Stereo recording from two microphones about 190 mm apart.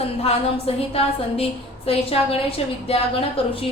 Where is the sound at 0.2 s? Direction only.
30° left (ahead or behind).